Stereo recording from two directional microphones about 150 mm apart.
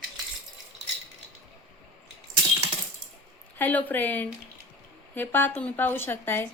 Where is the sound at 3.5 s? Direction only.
10° left (ahead or behind).